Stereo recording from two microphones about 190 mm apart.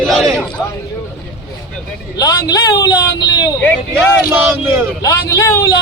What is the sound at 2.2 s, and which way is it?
Speech, 20° left (ahead or behind).